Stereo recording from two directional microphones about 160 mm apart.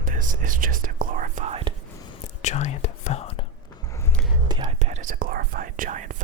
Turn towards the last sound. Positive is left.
turn(degrees=-50)  # may be behind; listen again after turning